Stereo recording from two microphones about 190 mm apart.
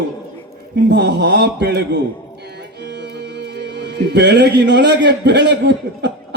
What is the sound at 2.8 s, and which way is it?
Music, 65° right (ahead or behind).